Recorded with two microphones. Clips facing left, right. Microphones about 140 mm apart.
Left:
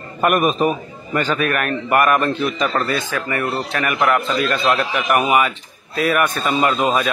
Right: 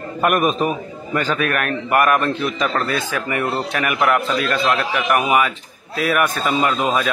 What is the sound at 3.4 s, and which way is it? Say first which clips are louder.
Speech: right 1 dB; 25° right (ahead or behind).